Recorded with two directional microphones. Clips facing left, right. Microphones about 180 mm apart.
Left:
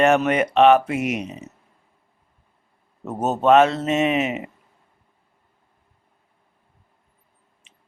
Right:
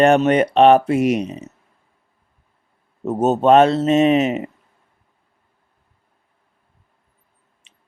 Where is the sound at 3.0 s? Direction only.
30° right (ahead or behind).